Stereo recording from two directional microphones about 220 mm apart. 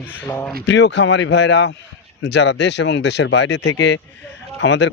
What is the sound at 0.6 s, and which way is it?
Speech, 55° left (ahead or behind).